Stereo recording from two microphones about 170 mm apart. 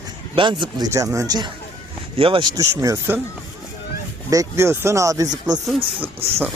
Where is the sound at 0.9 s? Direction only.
20° right (ahead or behind).